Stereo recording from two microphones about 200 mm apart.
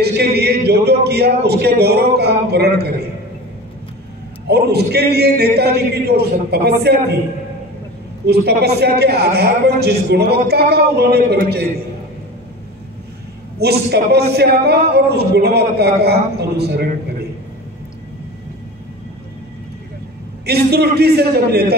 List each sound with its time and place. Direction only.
0.0 s a woman's voice: 55° right (ahead or behind)
4.5 s a woman's voice: 55° right (ahead or behind)
8.3 s a woman's voice: 55° right (ahead or behind)
13.6 s a man's voice: 55° right (ahead or behind)
20.4 s a woman's voice: 55° right (ahead or behind)